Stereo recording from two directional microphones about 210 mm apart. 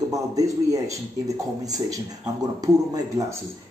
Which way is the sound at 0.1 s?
15° right (ahead or behind).